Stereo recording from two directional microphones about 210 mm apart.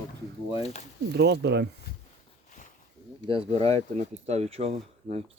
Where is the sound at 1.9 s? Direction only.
50° left (ahead or behind).